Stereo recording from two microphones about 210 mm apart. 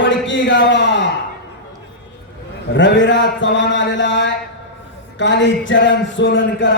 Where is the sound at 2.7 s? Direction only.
60° left (ahead or behind).